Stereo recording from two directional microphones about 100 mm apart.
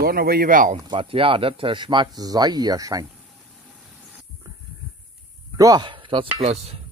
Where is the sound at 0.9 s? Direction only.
65° right (ahead or behind); by 3.0 s 35° right (ahead or behind).